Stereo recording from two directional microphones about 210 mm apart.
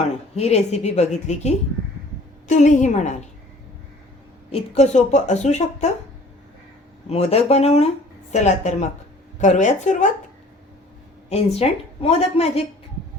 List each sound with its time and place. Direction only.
0.3 s a woman's voice: 30° left (ahead or behind)
4.5 s a woman's voice: 30° left (ahead or behind)
7.1 s a woman's voice: 30° left (ahead or behind)
11.3 s a woman's voice: 30° left (ahead or behind)